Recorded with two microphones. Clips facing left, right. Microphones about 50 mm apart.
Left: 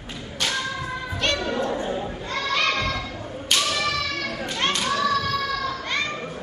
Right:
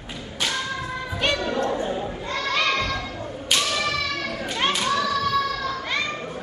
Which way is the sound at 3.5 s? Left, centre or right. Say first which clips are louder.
Even; centre.